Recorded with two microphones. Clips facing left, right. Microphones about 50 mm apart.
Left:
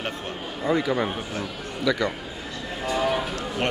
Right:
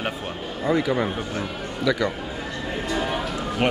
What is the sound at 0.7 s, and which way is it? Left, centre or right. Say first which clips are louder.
Speech: right 1 dB; centre.